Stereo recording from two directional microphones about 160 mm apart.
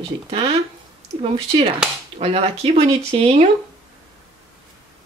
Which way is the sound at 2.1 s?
40° right (ahead or behind).